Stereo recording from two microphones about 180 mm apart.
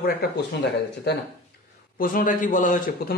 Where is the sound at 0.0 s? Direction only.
60° left (ahead or behind).